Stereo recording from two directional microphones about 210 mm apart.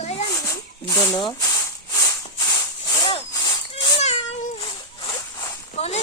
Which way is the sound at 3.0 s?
20° left (ahead or behind).